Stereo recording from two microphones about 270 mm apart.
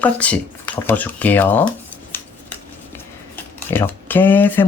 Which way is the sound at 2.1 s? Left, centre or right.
Centre.